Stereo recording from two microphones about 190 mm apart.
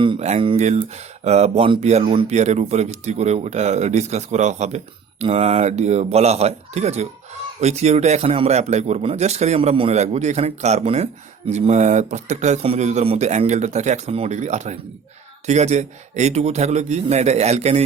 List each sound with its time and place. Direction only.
0.0 s a man's voice: 30° right (ahead or behind)